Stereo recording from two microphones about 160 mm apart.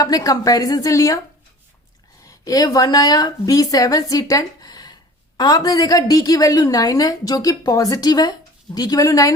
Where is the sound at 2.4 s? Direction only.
25° left (ahead or behind).